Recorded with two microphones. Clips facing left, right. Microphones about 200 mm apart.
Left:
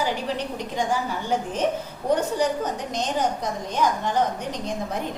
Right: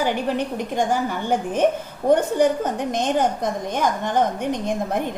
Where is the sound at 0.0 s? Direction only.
55° right (ahead or behind).